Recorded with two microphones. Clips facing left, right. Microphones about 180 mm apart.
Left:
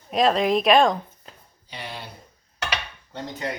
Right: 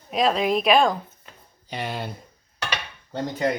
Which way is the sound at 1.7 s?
50° right (ahead or behind).